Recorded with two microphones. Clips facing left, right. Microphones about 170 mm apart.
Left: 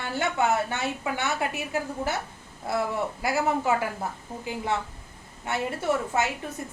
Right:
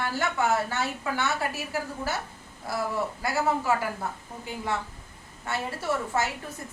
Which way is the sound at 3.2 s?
25° left (ahead or behind).